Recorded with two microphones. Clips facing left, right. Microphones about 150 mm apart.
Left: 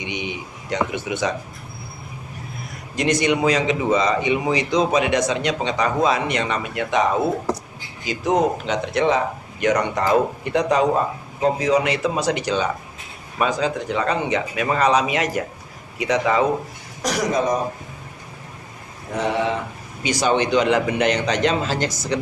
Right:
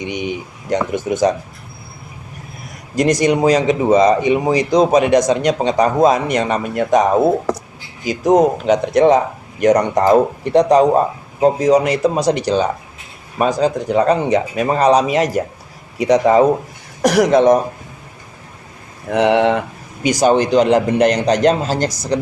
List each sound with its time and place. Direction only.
0.0 s speech: 45° right (ahead or behind)
2.9 s speech: 40° right (ahead or behind)
17.0 s speech: 65° right (ahead or behind)
19.1 s speech: 75° right (ahead or behind)
20.1 s speech: 45° right (ahead or behind)